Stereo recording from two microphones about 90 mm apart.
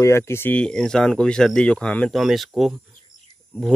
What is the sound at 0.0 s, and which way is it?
Speech, 30° left (ahead or behind).